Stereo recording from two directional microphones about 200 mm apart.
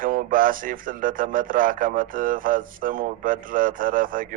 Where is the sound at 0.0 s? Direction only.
45° right (ahead or behind).